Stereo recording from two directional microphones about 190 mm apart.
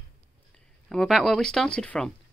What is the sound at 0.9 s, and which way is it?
Speech, centre (ahead or behind).